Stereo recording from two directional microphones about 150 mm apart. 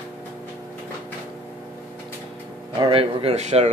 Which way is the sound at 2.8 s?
40° right (ahead or behind).